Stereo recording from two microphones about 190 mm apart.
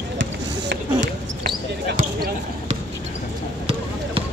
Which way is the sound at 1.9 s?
50° right (ahead or behind).